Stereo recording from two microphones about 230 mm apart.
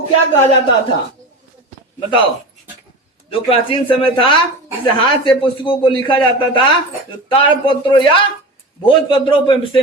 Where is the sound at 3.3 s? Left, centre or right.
Left.